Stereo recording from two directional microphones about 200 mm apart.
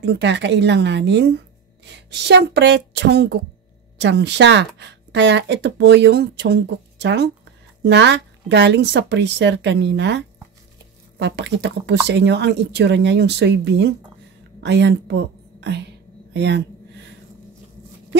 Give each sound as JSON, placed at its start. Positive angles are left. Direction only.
{"t": 0.0, "sound": "a woman's voice", "side_deg": -60}